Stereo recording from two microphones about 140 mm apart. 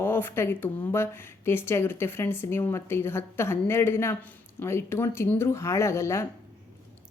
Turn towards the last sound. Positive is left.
turn(degrees=20)  # may be behind; listen again after turning